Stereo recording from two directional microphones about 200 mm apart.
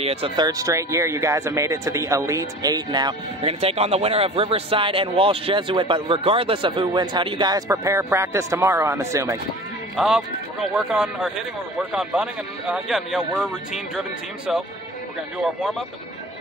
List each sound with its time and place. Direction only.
0.0 s speech: 30° right (ahead or behind)
0.5 s speech: 15° right (ahead or behind)
9.9 s speech: centre (ahead or behind)
15.3 s speech: centre (ahead or behind)